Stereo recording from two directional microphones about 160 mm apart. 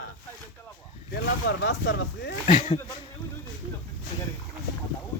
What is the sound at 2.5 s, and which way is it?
Speech, 45° left (ahead or behind).